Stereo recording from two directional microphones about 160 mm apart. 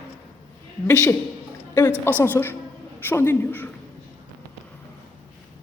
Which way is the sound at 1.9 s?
15° right (ahead or behind).